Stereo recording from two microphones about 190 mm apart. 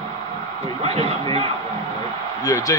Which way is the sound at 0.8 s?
30° right (ahead or behind).